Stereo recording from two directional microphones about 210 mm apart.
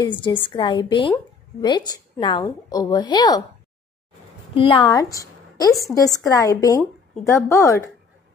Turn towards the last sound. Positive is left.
turn(degrees=15)  # may be behind; listen again after turning